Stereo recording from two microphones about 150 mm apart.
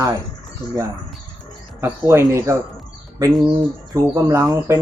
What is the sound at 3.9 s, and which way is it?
Speech, 15° right (ahead or behind).